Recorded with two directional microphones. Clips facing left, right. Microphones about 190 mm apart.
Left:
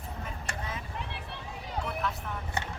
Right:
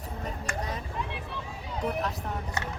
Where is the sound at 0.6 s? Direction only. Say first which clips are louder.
Right 3 dB; 40° right (ahead or behind).